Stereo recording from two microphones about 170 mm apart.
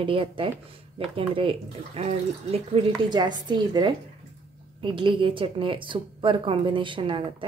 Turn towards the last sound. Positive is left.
turn(degrees=-30)  # may be behind; listen again after turning